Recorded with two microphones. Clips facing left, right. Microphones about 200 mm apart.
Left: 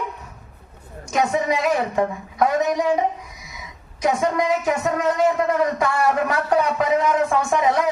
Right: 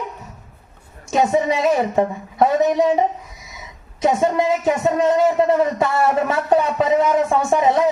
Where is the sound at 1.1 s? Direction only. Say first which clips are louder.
Right 3 dB; 25° right (ahead or behind).